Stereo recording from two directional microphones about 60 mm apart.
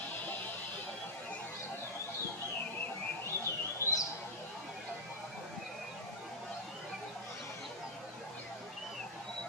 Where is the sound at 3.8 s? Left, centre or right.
Right.